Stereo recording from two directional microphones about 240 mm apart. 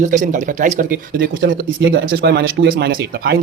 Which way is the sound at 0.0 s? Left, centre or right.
Right.